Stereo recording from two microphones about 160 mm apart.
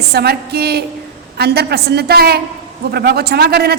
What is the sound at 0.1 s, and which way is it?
A woman's voice, 90° right.